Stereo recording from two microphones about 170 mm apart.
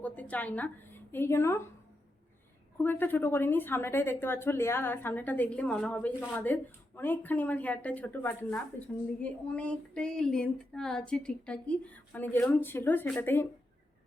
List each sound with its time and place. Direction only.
0.0 s a woman's voice: 10° left (ahead or behind)
2.7 s a woman's voice: 10° left (ahead or behind)